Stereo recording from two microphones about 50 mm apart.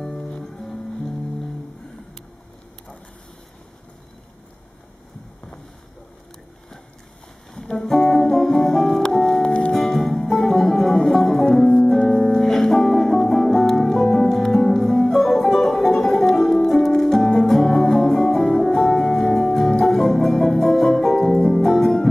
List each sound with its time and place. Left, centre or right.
0.0 s music: centre
7.5 s music: centre
9.4 s music: centre
9.8 s music: centre